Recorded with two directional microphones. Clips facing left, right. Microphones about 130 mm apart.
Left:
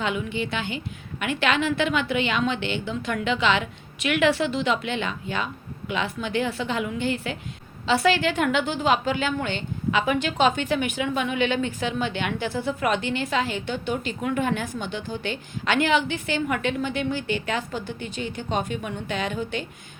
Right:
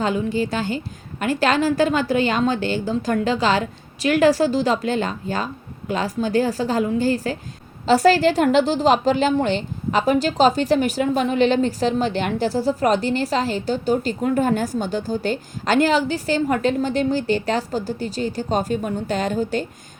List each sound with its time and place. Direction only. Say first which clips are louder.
0.0 s a woman's voice: right 6 dB; 35° right (ahead or behind)